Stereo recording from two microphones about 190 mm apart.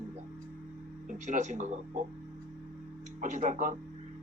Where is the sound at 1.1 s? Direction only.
40° right (ahead or behind).